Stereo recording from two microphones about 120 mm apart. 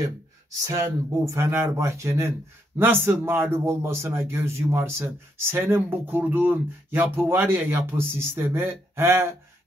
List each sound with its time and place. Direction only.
0.6 s a man's voice: 30° right (ahead or behind)